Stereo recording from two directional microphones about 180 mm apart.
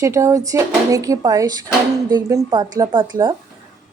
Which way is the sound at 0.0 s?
15° right (ahead or behind).